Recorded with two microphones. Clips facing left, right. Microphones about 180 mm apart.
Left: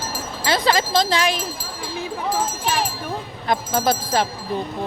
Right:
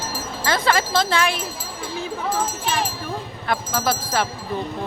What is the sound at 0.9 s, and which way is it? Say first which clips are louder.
Speech: left 1 dB; 35° left (ahead or behind).